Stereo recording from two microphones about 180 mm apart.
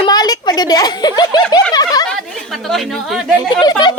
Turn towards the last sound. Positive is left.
turn(degrees=25)  # may be behind; listen again after turning